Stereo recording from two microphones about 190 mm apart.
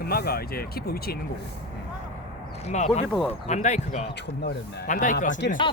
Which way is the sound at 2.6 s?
35° left (ahead or behind).